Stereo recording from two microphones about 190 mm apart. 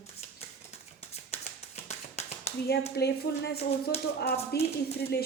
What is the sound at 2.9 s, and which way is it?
Speech, 60° left (ahead or behind).